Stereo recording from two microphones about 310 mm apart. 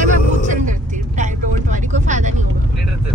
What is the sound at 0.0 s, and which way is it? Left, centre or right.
Vehicle, right.